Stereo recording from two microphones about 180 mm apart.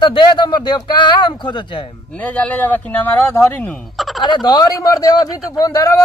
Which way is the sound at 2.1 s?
10° left (ahead or behind).